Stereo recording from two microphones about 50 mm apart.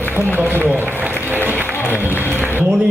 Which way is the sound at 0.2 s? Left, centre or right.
Left.